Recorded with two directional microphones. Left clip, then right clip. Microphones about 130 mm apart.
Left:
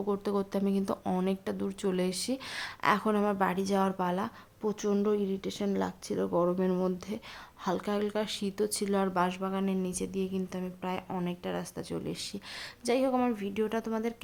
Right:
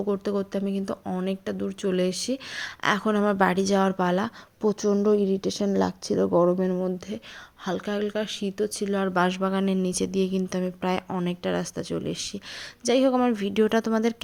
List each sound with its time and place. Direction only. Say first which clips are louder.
0.0 s speech: right 4 dB; 15° right (ahead or behind)
3.2 s a woman's voice: right 7 dB; 35° right (ahead or behind); by 6.7 s 15° right (ahead or behind)
6.7 s speech: right 3 dB; centre (ahead or behind)
7.6 s speech: right 3 dB; 15° right (ahead or behind)
9.1 s a woman's voice: right 6 dB; 35° right (ahead or behind)